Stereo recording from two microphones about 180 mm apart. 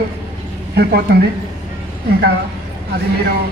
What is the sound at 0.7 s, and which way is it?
Speech, 65° right (ahead or behind).